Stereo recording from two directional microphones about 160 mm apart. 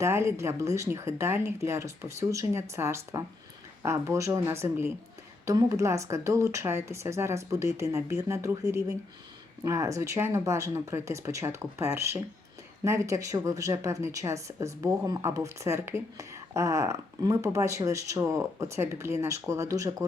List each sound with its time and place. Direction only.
0.0 s speech: 15° right (ahead or behind)